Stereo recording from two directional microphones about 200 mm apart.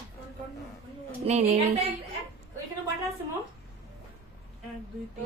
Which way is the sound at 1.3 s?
30° right (ahead or behind).